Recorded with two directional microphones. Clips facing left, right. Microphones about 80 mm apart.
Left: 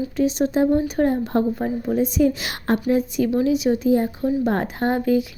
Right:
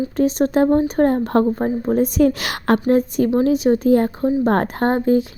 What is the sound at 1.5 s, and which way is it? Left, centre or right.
Speech, right.